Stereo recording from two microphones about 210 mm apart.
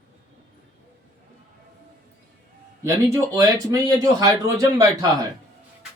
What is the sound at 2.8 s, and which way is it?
Speech, 15° right (ahead or behind).